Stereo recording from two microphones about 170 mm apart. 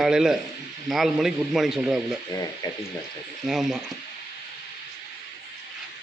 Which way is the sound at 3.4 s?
Centre (ahead or behind).